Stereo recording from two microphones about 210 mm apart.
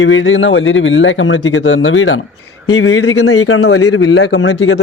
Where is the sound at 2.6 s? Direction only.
90° left; by 4.8 s 60° left (ahead or behind).